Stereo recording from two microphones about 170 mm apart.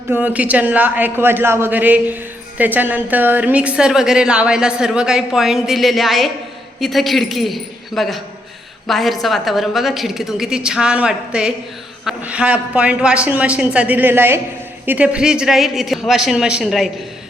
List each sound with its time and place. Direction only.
0.1 s a man's voice: 10° right (ahead or behind)